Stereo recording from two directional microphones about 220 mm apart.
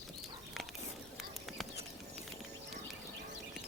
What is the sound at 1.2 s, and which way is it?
Bird, centre (ahead or behind).